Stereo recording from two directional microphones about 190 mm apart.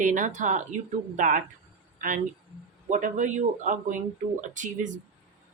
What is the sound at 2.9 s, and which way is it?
A woman's voice, 40° right (ahead or behind).